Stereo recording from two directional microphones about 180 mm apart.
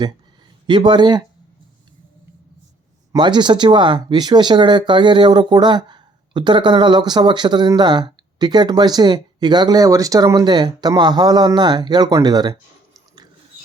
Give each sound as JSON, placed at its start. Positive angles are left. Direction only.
{"t": 0.7, "sound": "speech", "side_deg": -25}
{"t": 3.1, "sound": "speech", "side_deg": -25}